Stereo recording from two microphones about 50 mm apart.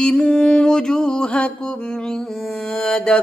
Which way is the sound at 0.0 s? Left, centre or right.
Centre.